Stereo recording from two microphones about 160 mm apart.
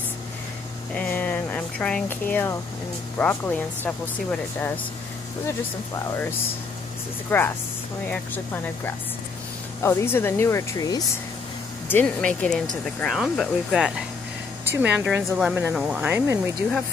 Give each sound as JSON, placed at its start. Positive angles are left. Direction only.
{"t": 0.9, "sound": "speech", "side_deg": 10}
{"t": 7.2, "sound": "speech", "side_deg": 15}
{"t": 9.8, "sound": "speech", "side_deg": 15}
{"t": 11.9, "sound": "speech", "side_deg": 10}